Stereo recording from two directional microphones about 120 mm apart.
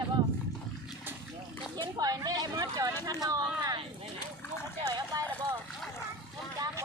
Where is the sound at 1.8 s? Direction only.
35° right (ahead or behind).